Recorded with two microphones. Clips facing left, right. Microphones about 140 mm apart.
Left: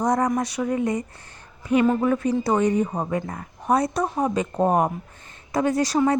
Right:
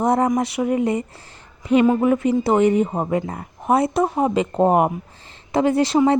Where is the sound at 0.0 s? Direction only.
25° right (ahead or behind).